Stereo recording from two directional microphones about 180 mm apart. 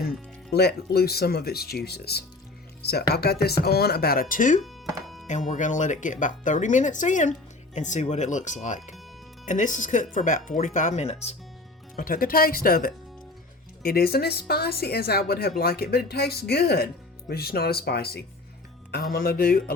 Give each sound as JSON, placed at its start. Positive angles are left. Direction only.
{"t": 0.5, "sound": "a woman's voice", "side_deg": 65}
{"t": 5.0, "sound": "music", "side_deg": 0}
{"t": 5.3, "sound": "speech", "side_deg": 45}
{"t": 11.9, "sound": "a woman's voice", "side_deg": 50}